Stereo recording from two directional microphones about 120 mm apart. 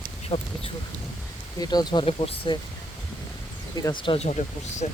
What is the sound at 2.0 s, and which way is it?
Speech, 55° left (ahead or behind).